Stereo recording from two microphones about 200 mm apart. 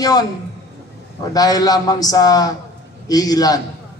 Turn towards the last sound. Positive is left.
turn(degrees=20)  # may be behind; listen again after turning